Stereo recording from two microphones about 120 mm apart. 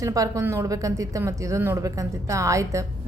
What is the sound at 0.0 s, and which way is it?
A woman's voice, 30° right (ahead or behind).